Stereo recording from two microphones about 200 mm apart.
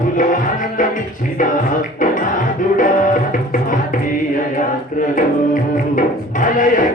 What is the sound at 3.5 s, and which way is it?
Music, 40° left (ahead or behind).